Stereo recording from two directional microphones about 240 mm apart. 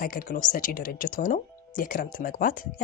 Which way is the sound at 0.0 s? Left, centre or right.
Left.